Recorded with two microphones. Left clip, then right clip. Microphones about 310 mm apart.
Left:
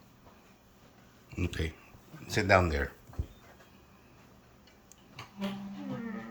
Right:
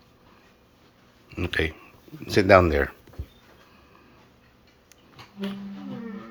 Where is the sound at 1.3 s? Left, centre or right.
Centre.